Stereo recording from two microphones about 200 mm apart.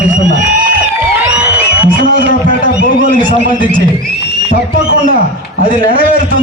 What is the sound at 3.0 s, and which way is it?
Speech, 45° right (ahead or behind).